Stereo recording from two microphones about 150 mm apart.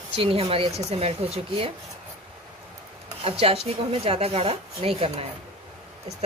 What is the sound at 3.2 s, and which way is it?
Speech, 40° right (ahead or behind).